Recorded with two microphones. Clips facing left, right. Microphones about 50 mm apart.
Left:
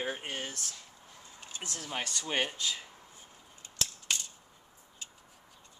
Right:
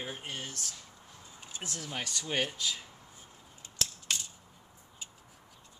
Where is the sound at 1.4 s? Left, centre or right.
Centre.